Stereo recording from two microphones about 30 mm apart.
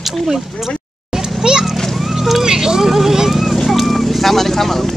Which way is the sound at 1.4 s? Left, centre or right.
Right.